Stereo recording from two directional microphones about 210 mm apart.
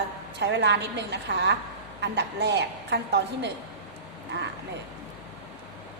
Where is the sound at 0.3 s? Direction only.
55° right (ahead or behind).